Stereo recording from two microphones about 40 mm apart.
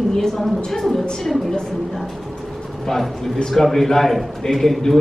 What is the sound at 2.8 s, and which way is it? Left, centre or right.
A woman's voice, centre.